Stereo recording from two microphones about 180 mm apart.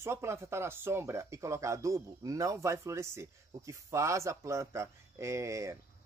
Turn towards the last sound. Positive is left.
turn(degrees=-15)  # may be behind; listen again after turning